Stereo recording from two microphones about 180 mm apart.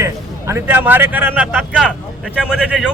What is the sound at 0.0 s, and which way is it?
A man's voice, 15° right (ahead or behind).